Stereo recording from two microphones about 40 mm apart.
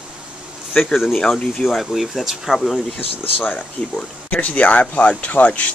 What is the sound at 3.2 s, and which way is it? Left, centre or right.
Speech, left.